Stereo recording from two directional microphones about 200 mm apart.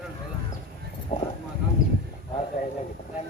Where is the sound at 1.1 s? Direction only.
30° left (ahead or behind).